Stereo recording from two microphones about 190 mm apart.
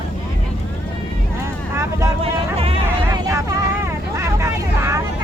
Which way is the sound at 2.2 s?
30° right (ahead or behind).